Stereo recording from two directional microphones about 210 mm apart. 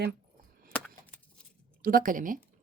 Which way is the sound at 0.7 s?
5° left (ahead or behind).